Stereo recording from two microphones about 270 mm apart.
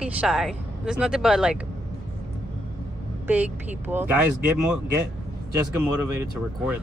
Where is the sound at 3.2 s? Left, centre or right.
Centre.